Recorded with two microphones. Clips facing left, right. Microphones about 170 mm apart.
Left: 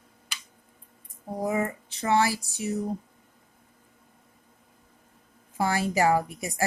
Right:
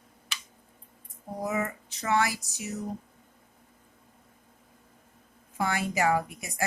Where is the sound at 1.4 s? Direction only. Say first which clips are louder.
Left 3 dB; 30° left (ahead or behind).